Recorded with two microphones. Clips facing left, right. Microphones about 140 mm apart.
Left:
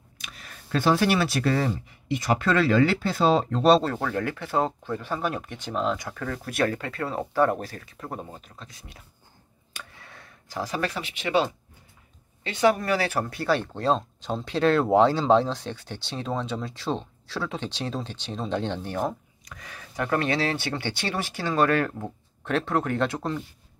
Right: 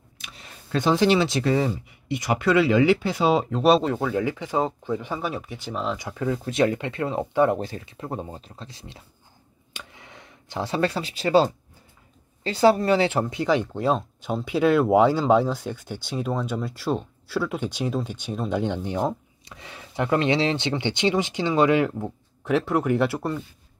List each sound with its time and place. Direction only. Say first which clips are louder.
0.4 s speech: right 1 dB; 20° right (ahead or behind)
5.3 s speech: even; centre (ahead or behind)
6.0 s speech: right 6 dB; 15° right (ahead or behind)
9.8 s a sound: right 1 dB; 20° right (ahead or behind); by 11.5 s 35° right (ahead or behind)
12.4 s speech: right 4 dB; 30° right (ahead or behind); by 23.4 s 5° right (ahead or behind)